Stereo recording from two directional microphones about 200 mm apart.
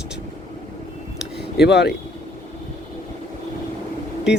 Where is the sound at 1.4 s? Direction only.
55° left (ahead or behind).